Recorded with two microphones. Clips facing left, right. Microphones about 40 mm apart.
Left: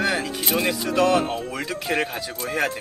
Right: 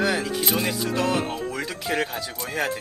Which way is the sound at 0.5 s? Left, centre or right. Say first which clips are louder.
Left 7 dB; left.